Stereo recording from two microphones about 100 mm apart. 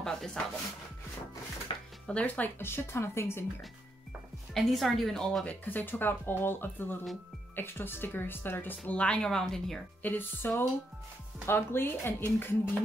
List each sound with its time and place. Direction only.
0.0 s a sound: 5° left (ahead or behind)
1.7 s music: 55° left (ahead or behind)
2.0 s speech: 15° left (ahead or behind)
4.6 s speech: centre (ahead or behind)
10.0 s speech: 20° left (ahead or behind)